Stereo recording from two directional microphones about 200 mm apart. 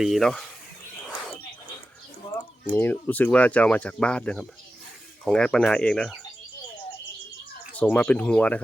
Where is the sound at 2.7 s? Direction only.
10° left (ahead or behind).